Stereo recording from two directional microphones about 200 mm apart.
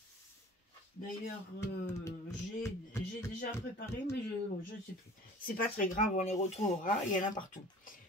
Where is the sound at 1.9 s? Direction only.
15° left (ahead or behind).